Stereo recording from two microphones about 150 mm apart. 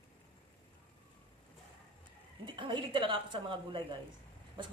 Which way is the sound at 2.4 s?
30° right (ahead or behind).